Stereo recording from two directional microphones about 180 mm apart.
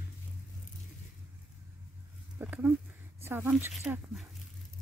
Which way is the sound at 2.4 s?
10° right (ahead or behind).